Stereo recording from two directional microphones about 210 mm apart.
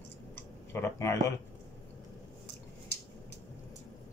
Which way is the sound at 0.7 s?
15° left (ahead or behind).